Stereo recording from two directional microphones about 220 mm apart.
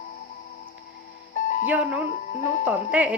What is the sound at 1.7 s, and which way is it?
A woman's voice, 5° right (ahead or behind).